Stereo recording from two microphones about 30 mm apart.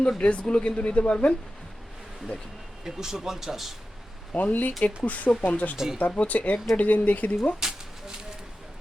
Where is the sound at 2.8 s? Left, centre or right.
Centre.